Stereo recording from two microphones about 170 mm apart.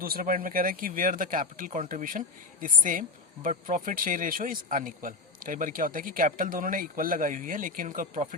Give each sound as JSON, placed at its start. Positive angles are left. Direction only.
{"t": 0.0, "sound": "speech", "side_deg": -60}